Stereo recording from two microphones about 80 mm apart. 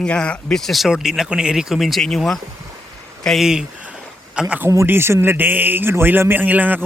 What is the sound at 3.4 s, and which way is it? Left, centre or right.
Speech, centre.